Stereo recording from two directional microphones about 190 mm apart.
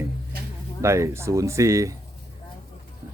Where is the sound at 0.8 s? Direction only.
15° right (ahead or behind).